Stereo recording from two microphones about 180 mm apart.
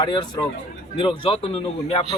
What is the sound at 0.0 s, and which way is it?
A man's voice, 25° left (ahead or behind).